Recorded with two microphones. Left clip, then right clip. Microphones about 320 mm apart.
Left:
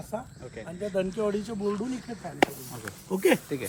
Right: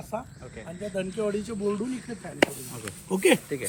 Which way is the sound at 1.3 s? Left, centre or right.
Centre.